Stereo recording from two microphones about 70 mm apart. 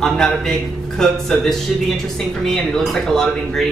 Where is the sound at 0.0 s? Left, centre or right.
Centre.